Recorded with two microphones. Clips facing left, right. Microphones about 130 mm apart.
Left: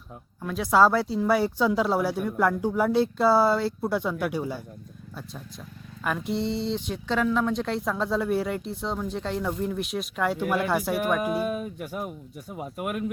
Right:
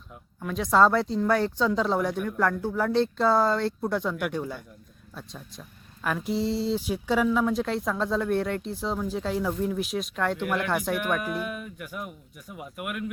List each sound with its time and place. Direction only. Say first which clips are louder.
0.4 s speech: left 1 dB; 5° left (ahead or behind)
11.3 s speech: left 5 dB; 35° left (ahead or behind)